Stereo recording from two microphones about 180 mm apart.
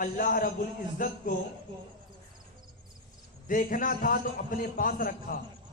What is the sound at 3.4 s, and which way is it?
A man's voice, 50° left (ahead or behind).